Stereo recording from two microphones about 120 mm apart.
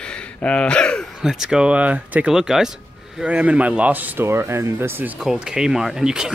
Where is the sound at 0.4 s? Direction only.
10° left (ahead or behind).